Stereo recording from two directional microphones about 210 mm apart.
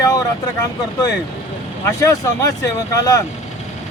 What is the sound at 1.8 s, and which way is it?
Speech, 15° left (ahead or behind).